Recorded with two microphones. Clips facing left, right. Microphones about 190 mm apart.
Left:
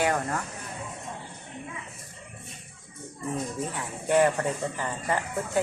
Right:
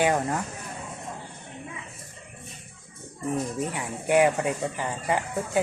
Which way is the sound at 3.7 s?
15° right (ahead or behind).